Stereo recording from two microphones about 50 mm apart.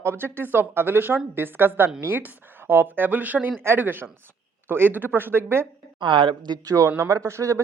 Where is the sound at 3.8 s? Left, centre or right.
Right.